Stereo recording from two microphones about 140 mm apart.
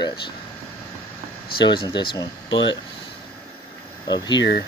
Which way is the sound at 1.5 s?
35° left (ahead or behind).